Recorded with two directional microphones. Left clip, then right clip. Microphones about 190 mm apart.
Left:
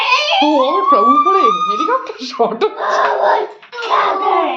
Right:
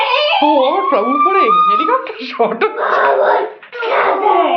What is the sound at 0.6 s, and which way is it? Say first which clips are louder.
A woman's voice: left 2 dB; 25° left (ahead or behind).